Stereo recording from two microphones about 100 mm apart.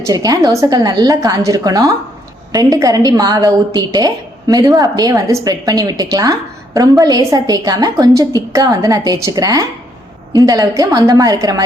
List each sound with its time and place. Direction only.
0.0 s a woman's voice: 35° right (ahead or behind)